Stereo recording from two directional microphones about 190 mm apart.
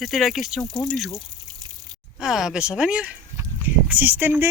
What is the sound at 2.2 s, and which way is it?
Speech, centre (ahead or behind).